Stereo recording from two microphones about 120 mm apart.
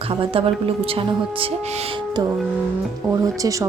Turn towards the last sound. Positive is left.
turn(degrees=-30)  # may be behind; listen again after turning